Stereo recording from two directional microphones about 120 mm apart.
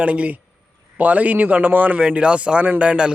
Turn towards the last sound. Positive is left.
turn(degrees=-10)  # may be behind; listen again after turning